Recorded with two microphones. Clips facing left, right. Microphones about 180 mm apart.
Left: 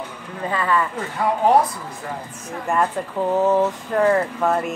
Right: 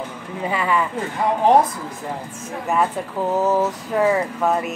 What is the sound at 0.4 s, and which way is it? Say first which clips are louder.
Speech: even; 15° right (ahead or behind).